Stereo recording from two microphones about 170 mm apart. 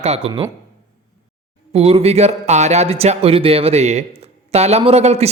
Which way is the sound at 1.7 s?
35° right (ahead or behind).